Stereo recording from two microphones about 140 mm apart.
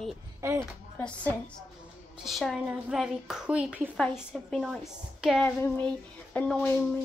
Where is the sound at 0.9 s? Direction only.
10° left (ahead or behind).